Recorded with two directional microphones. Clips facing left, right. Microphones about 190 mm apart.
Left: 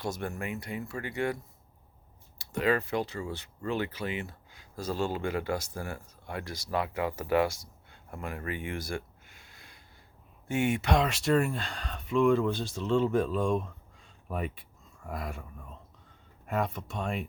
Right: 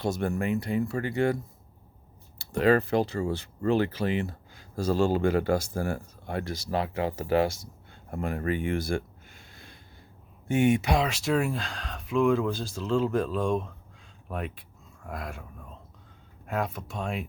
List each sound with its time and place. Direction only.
0.0 s speech: 30° right (ahead or behind)
2.4 s speech: 30° right (ahead or behind)
8.2 s a sound: 35° right (ahead or behind)
10.5 s speech: 20° right (ahead or behind)
10.9 s speech: centre (ahead or behind)
16.5 s speech: centre (ahead or behind)